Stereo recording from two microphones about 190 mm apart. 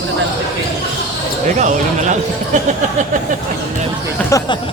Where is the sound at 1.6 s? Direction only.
40° right (ahead or behind).